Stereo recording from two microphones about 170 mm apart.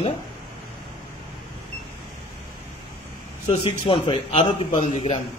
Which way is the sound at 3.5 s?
30° left (ahead or behind).